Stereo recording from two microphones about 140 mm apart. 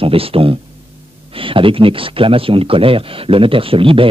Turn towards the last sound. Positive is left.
turn(degrees=-40)  # may be behind; listen again after turning